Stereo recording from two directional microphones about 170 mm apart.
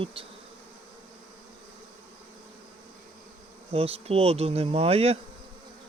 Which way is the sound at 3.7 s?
35° right (ahead or behind).